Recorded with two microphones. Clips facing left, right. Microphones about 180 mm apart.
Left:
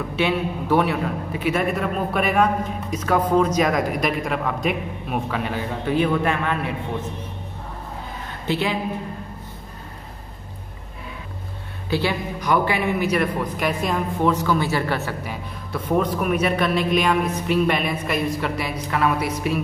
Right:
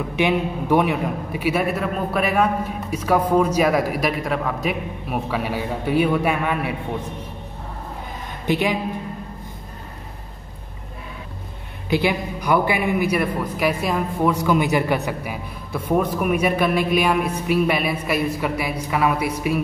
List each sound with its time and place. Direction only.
0.1 s a man's voice: 15° right (ahead or behind)
8.5 s a man's voice: 15° right (ahead or behind)
11.9 s a man's voice: 15° right (ahead or behind)